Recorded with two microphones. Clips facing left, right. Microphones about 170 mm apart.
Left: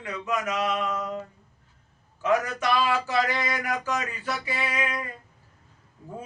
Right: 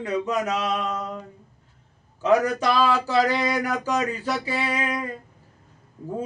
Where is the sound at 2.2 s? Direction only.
35° right (ahead or behind).